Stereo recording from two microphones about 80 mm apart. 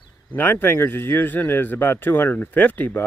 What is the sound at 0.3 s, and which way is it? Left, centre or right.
A man's voice, left.